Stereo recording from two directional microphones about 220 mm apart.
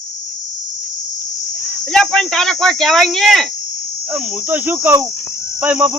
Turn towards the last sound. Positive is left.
turn(degrees=-10)  # may be behind; listen again after turning